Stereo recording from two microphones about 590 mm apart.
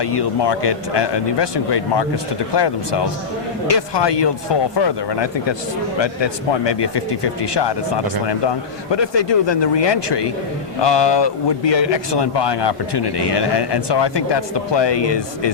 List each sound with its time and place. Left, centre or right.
0.0 s speech: left
8.9 s speech: left